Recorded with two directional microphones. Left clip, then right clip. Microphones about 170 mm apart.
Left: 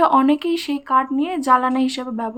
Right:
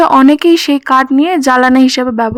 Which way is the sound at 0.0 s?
65° right (ahead or behind).